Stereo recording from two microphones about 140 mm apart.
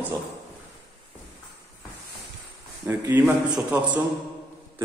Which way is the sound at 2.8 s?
20° right (ahead or behind).